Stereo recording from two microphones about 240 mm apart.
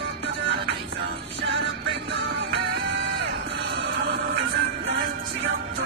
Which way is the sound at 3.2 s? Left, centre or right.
Right.